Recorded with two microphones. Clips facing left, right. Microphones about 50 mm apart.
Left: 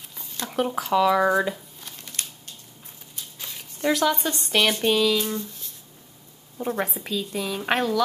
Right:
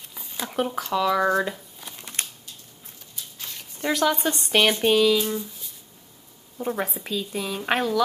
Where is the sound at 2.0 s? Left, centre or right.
Right.